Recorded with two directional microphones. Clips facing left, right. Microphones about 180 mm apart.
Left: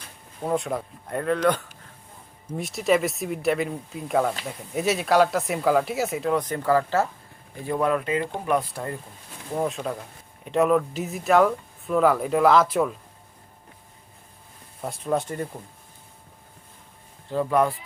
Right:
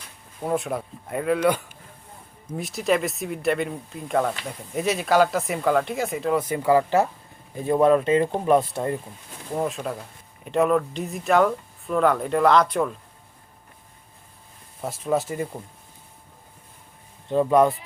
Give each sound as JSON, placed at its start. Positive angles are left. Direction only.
{"t": 0.4, "sound": "speech", "side_deg": 0}
{"t": 9.6, "sound": "speech", "side_deg": 0}
{"t": 14.8, "sound": "speech", "side_deg": 0}
{"t": 17.2, "sound": "speech", "side_deg": -20}